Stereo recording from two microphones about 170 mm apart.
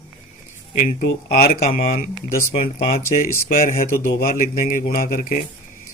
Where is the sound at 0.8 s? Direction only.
65° left (ahead or behind).